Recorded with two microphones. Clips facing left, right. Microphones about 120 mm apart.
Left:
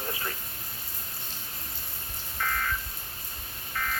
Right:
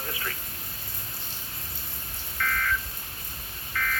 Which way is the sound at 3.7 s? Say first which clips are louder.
Right 2 dB; 30° left (ahead or behind).